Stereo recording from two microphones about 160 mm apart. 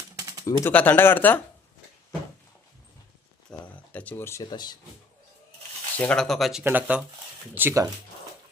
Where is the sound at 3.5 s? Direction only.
10° left (ahead or behind).